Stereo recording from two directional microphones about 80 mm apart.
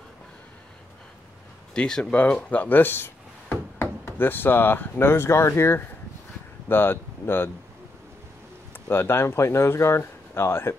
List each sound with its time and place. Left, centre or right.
1.7 s speech: centre; by 7.5 s left
8.7 s speech: left